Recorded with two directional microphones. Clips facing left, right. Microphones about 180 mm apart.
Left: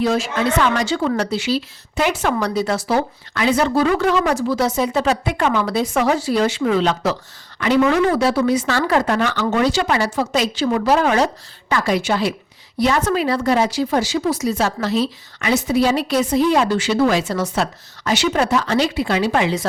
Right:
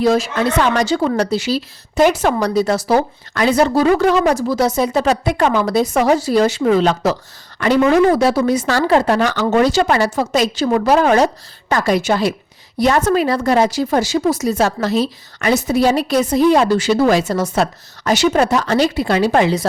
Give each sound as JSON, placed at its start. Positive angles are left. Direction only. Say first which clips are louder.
{"t": 0.0, "sound": "speech", "louder": "right 3 dB", "side_deg": -40}
{"t": 8.9, "sound": "a woman's voice", "louder": "right 5 dB", "side_deg": -30}